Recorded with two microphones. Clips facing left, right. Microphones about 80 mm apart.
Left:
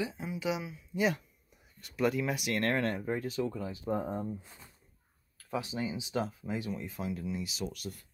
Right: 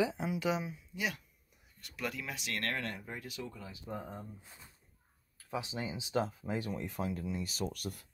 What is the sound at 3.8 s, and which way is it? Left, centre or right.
Speech, left.